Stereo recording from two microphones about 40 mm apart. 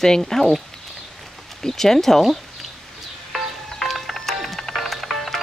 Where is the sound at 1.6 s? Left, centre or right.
Centre.